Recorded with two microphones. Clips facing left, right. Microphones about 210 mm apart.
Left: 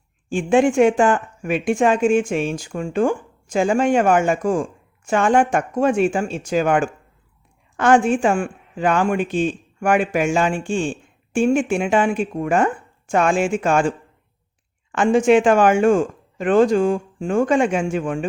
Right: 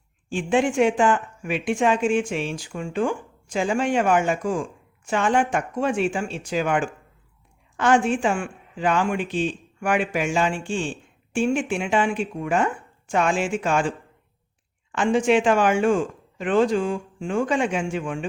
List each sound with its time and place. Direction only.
0.3 s speech: 45° left (ahead or behind)
14.9 s speech: 45° left (ahead or behind)